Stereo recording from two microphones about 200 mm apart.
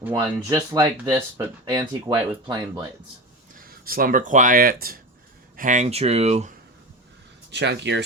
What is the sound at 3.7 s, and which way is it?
Speech, 45° right (ahead or behind).